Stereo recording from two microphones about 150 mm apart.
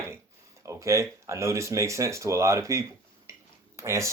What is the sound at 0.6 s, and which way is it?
Speech, 20° right (ahead or behind).